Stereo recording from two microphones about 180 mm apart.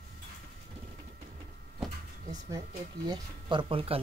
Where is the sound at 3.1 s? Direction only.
25° right (ahead or behind).